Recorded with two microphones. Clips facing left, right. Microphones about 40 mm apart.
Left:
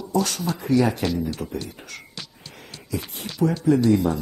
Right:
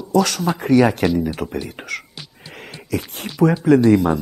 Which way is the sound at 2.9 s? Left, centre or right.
Right.